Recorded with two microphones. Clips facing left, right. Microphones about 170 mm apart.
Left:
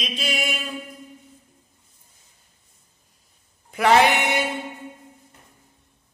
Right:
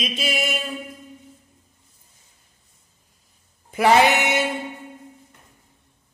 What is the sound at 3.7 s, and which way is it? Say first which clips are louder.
Speech: right 1 dB; centre (ahead or behind).